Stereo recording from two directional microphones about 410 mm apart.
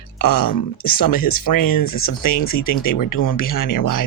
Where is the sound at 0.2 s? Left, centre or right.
Left.